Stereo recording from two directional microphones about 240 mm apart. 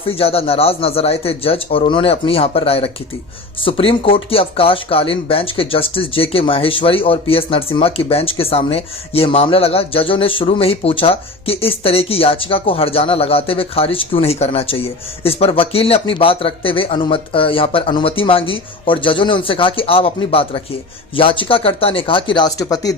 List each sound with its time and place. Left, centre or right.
0.1 s speech: left